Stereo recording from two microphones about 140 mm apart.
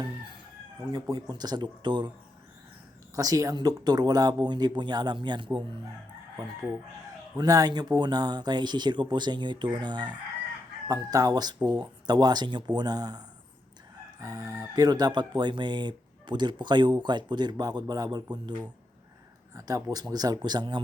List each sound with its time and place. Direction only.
0.9 s speech: 25° right (ahead or behind)
3.2 s speech: 25° right (ahead or behind)
7.3 s speech: 25° right (ahead or behind)